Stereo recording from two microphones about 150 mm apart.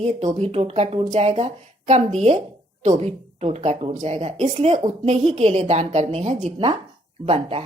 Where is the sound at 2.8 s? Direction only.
45° right (ahead or behind).